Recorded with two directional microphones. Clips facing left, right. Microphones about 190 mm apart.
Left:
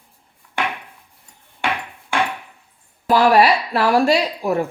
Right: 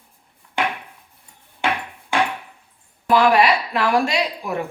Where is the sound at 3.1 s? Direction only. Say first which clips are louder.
Left 2 dB; 35° left (ahead or behind).